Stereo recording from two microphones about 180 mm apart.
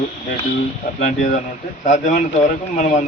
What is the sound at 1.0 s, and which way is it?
A man's voice, 45° left (ahead or behind).